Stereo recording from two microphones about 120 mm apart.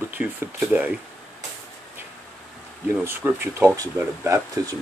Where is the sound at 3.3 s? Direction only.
25° right (ahead or behind).